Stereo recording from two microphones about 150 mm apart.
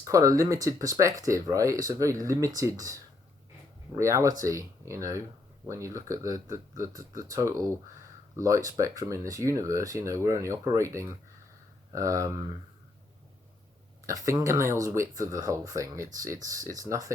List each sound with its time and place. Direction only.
0.0 s speech: 20° right (ahead or behind)
14.1 s speech: 20° right (ahead or behind)